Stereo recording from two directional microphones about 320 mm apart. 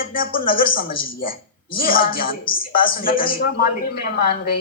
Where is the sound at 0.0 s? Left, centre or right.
Left.